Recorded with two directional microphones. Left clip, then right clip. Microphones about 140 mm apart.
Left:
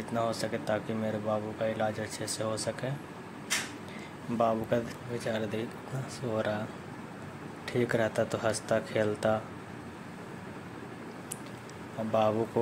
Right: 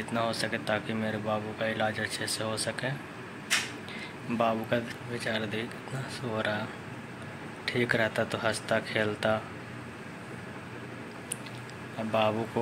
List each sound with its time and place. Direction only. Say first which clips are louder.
0.1 s speech: right 1 dB; 20° left (ahead or behind)
4.4 s speech: even; 20° left (ahead or behind)
7.6 s speech: right 2 dB; 25° left (ahead or behind)
12.1 s speech: even; 20° left (ahead or behind)